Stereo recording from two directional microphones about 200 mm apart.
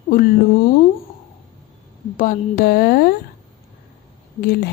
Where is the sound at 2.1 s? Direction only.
45° left (ahead or behind).